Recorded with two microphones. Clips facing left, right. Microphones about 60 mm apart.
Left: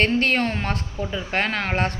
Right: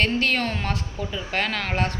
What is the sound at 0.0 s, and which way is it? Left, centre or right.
A woman's voice, left.